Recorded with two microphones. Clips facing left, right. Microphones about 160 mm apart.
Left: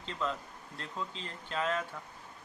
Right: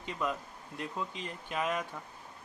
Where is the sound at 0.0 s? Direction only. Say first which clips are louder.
Right 1 dB; 10° right (ahead or behind).